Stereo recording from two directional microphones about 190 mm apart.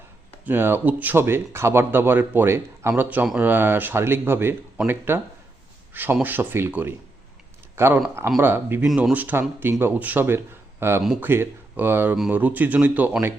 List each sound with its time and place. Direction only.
0.4 s speech: 10° right (ahead or behind)
11.0 s speech: centre (ahead or behind)